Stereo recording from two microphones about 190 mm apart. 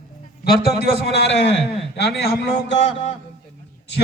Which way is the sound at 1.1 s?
65° left (ahead or behind).